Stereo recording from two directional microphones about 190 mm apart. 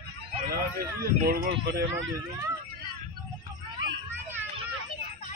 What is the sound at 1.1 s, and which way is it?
Speech, 50° right (ahead or behind).